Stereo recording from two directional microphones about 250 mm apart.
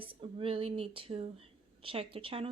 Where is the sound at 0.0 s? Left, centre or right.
Right.